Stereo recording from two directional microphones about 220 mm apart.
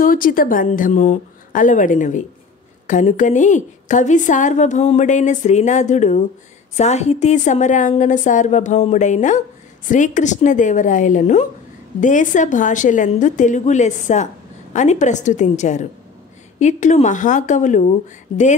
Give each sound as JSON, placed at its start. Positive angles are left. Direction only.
{"t": 0.0, "sound": "a woman's voice", "side_deg": 40}